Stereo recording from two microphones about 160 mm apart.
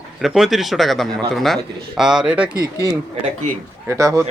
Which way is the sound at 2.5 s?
25° right (ahead or behind).